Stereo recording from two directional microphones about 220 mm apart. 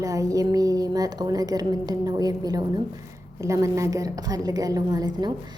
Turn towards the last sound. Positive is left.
turn(degrees=-20)  # may be behind; listen again after turning